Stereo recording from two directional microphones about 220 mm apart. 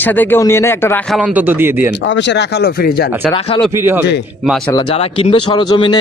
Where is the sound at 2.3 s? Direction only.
45° left (ahead or behind).